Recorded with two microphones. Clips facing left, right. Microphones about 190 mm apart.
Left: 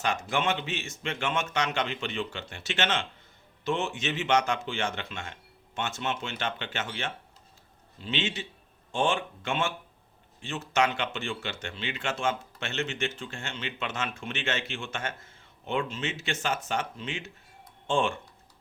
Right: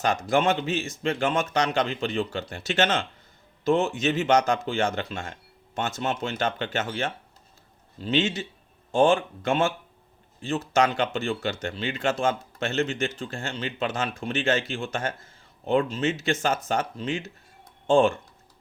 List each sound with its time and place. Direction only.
0.0 s speech: 40° right (ahead or behind)